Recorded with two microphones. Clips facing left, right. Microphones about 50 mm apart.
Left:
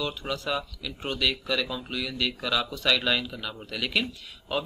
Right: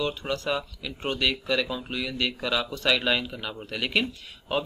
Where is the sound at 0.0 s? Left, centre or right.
Centre.